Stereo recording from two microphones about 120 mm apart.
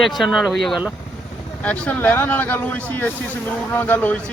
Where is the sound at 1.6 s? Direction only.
10° left (ahead or behind).